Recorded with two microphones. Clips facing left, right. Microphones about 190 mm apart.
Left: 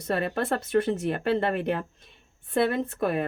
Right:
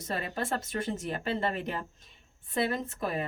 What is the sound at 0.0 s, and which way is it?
Speech, 60° left (ahead or behind).